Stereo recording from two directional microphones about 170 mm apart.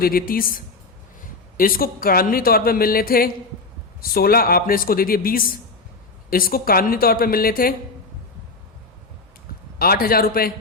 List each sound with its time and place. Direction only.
0.0 s speech: 60° left (ahead or behind)
9.7 s speech: 60° left (ahead or behind)